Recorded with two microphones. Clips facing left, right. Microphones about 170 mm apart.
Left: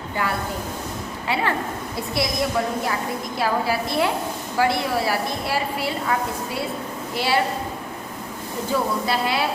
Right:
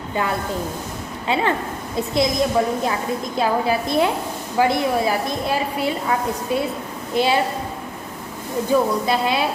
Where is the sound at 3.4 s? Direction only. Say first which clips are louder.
Right 3 dB; 20° right (ahead or behind).